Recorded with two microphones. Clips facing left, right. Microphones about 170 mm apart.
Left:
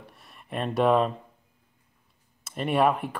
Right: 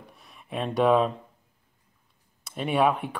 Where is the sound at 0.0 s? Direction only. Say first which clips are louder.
Even; centre (ahead or behind).